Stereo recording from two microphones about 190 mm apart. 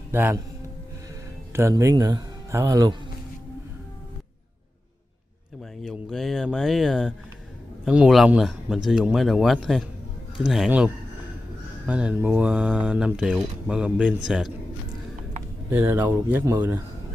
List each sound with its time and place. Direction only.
0.1 s a man's voice: 10° right (ahead or behind)
1.5 s speech: 15° right (ahead or behind)
5.8 s speech: centre (ahead or behind)
15.7 s speech: 10° right (ahead or behind)